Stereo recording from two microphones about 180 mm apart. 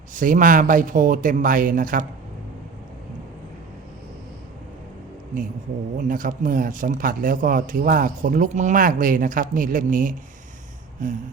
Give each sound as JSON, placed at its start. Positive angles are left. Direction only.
{"t": 0.1, "sound": "speech", "side_deg": -45}
{"t": 6.0, "sound": "speech", "side_deg": -50}